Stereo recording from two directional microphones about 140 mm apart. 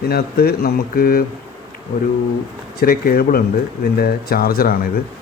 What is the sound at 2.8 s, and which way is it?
Speech, 90° left.